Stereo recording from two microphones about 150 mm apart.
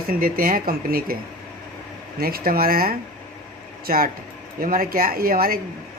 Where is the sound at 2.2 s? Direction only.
85° right.